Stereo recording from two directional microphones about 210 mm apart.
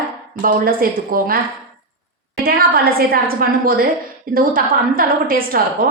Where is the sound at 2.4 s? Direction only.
45° right (ahead or behind).